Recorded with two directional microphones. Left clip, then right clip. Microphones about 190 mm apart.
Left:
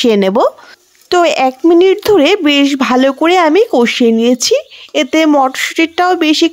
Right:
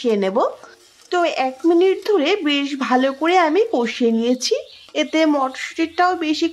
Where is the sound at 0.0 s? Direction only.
50° left (ahead or behind).